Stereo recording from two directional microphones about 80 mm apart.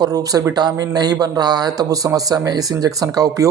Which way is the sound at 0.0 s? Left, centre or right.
Right.